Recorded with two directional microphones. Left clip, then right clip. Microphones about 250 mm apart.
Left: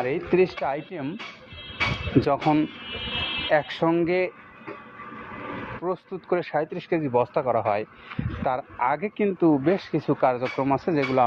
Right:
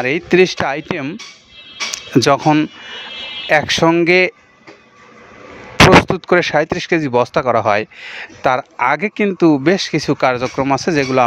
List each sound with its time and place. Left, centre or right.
0.0 s speech: right
2.1 s speech: right
6.1 s speech: right